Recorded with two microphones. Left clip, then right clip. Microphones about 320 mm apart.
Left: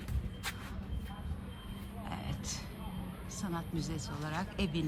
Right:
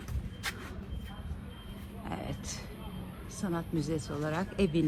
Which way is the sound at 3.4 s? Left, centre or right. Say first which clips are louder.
Right 5 dB; centre.